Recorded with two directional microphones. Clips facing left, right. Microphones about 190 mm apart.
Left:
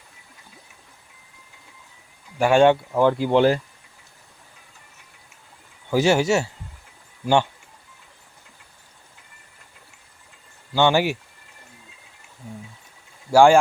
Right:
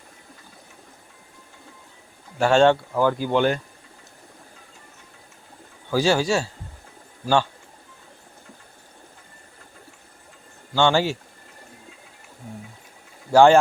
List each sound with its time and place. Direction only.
2.4 s speech: 15° left (ahead or behind)
5.9 s speech: 20° left (ahead or behind)
10.8 s speech: 15° left (ahead or behind)
13.3 s speech: 10° left (ahead or behind)